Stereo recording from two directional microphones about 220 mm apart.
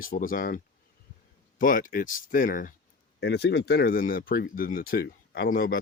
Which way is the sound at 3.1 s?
50° left (ahead or behind).